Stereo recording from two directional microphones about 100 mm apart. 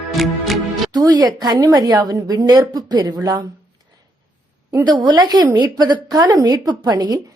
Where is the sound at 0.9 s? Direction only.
40° right (ahead or behind).